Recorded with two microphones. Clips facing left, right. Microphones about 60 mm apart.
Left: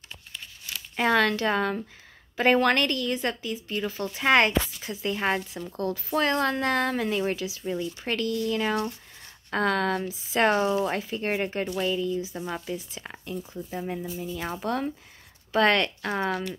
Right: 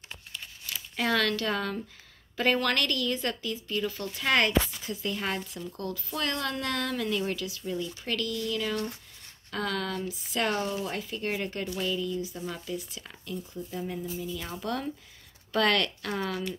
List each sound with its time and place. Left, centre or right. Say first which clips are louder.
0.9 s speech: left 5 dB; left
4.2 s a woman's voice: left 4 dB; left
11.0 s a woman's voice: left 4 dB; left
13.4 s speech: left 2 dB; left
13.7 s a woman's voice: left 2 dB; left